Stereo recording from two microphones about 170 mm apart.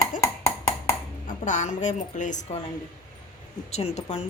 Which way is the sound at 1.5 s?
45° left (ahead or behind).